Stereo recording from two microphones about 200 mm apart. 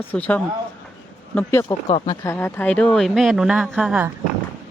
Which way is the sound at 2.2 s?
10° left (ahead or behind).